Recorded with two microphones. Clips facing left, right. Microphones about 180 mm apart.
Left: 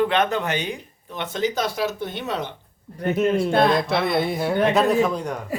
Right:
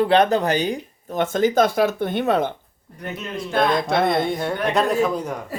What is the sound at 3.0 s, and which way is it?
Speech, 50° left (ahead or behind).